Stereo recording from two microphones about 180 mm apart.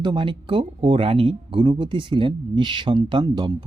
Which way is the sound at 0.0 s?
25° right (ahead or behind).